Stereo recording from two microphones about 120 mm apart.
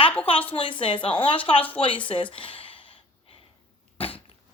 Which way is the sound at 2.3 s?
45° left (ahead or behind).